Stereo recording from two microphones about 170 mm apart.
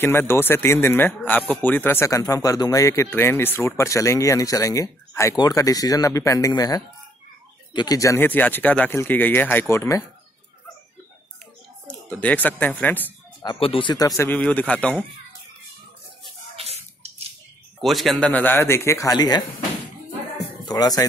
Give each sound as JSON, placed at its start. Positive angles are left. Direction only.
{"t": 0.0, "sound": "speech", "side_deg": 15}
{"t": 11.9, "sound": "speech", "side_deg": 10}
{"t": 13.4, "sound": "speech", "side_deg": 30}
{"t": 16.5, "sound": "drip", "side_deg": -40}
{"t": 17.7, "sound": "speech", "side_deg": 0}
{"t": 20.6, "sound": "speech", "side_deg": 20}